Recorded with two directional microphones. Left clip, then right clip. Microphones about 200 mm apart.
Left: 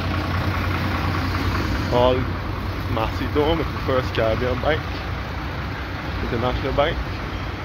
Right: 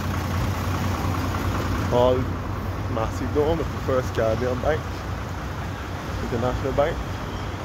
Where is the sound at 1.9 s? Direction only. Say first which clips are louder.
Left 1 dB; 5° right (ahead or behind).